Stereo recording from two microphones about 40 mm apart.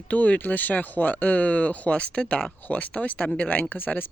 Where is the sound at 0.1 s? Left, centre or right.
Left.